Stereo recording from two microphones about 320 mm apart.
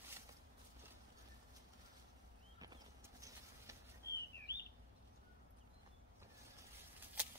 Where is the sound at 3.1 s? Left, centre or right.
Centre.